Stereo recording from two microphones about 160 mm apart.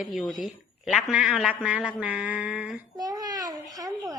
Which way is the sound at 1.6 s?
5° right (ahead or behind).